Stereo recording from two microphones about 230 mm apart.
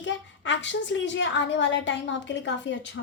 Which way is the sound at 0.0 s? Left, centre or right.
Left.